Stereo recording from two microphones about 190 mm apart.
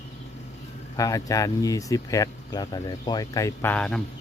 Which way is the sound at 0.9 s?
15° left (ahead or behind).